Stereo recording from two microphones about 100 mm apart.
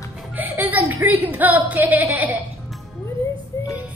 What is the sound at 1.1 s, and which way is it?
Speech, 20° right (ahead or behind).